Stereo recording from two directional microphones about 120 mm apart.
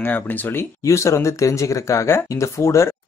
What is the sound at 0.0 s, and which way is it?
Speech, 15° left (ahead or behind).